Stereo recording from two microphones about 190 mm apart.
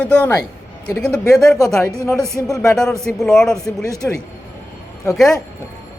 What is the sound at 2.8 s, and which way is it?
Speech, 5° left (ahead or behind).